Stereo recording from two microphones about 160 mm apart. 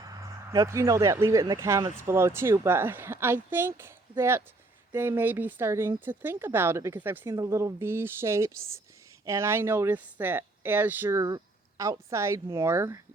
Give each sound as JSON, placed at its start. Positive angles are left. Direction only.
{"t": 0.0, "sound": "speech", "side_deg": -20}